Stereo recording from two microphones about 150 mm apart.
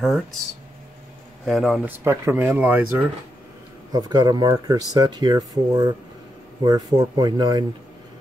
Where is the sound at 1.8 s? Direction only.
15° right (ahead or behind).